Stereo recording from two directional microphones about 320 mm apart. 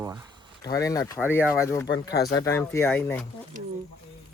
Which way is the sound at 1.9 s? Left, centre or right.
Left.